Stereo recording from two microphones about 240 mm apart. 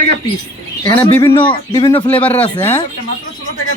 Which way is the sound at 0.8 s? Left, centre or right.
Centre.